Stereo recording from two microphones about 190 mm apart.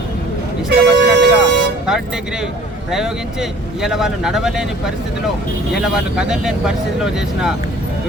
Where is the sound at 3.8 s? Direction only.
Centre (ahead or behind).